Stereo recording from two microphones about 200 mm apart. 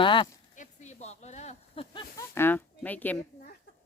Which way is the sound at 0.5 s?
35° left (ahead or behind).